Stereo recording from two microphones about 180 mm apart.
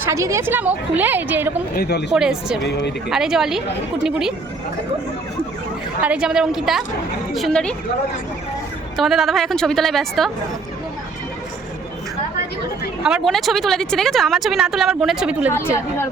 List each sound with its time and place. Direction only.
0.0 s a woman's voice: 15° right (ahead or behind)
1.7 s speech: 60° left (ahead or behind)
2.1 s speech: 5° right (ahead or behind)
2.6 s speech: 70° left (ahead or behind)
3.1 s speech: centre (ahead or behind)
6.0 s speech: 5° right (ahead or behind)
9.0 s speech: centre (ahead or behind)
13.0 s speech: 5° right (ahead or behind)